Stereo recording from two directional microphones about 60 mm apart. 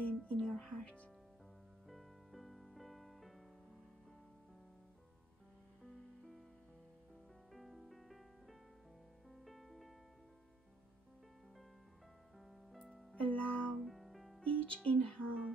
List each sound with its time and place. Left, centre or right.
0.0 s whispering: centre
0.5 s music: centre
1.9 s music: centre
7.5 s music: centre
12.7 s music: centre
13.1 s music: left
13.8 s music: centre
14.4 s speech: centre